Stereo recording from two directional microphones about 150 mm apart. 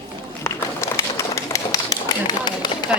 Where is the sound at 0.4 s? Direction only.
20° left (ahead or behind).